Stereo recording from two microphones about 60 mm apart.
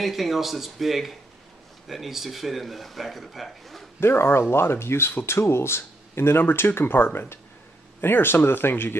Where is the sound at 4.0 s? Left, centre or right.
Left.